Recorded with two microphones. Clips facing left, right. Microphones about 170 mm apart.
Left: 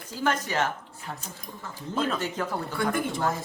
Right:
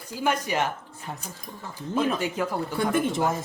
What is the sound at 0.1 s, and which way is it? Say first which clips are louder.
Speech: right 1 dB; 10° right (ahead or behind).